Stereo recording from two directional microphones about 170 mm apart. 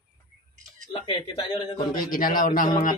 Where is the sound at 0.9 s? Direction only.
30° left (ahead or behind).